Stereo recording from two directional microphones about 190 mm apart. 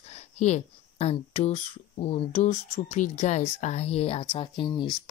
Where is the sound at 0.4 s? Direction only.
35° left (ahead or behind).